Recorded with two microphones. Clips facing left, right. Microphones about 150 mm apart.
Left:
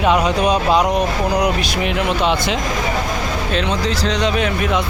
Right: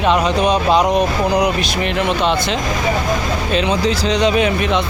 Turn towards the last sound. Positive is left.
turn(degrees=5)  # may be behind; listen again after turning